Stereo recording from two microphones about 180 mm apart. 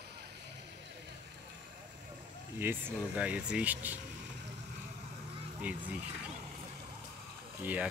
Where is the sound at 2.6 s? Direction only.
10° right (ahead or behind).